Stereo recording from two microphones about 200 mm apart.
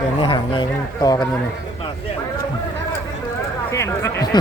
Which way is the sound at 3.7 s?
15° left (ahead or behind).